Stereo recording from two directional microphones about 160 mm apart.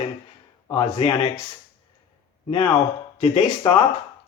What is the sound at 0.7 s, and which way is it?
Speech, 35° left (ahead or behind).